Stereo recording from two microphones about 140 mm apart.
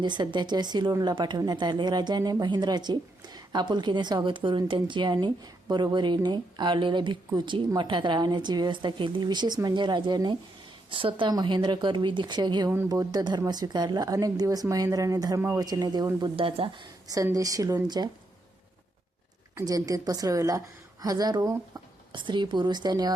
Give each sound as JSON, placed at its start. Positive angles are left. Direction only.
{"t": 0.0, "sound": "a woman's voice", "side_deg": -30}
{"t": 15.6, "sound": "a woman's voice", "side_deg": -25}
{"t": 19.5, "sound": "a woman's voice", "side_deg": -25}